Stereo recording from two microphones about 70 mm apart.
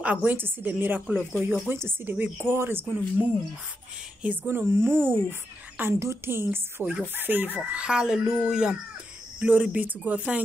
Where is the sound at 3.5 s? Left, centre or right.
Centre.